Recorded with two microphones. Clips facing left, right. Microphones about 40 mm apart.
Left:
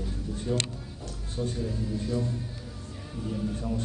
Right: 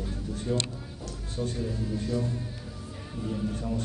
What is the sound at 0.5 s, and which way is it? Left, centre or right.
Speech, centre.